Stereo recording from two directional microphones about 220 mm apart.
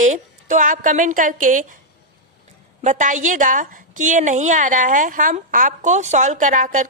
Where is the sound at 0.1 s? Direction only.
35° right (ahead or behind).